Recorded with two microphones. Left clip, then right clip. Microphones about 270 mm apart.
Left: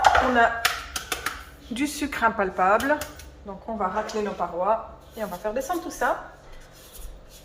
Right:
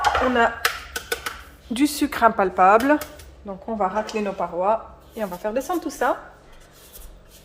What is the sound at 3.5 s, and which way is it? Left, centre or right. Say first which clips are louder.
Speech: right 4 dB; right.